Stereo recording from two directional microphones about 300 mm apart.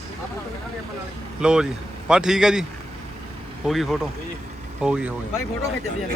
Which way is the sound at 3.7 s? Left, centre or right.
Centre.